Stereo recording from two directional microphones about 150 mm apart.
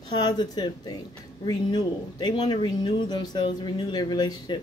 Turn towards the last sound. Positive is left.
turn(degrees=25)  # may be behind; listen again after turning